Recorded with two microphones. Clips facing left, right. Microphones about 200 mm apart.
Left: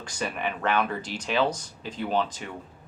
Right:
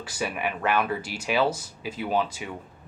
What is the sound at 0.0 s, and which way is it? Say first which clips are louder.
Speech: right 1 dB; 5° right (ahead or behind).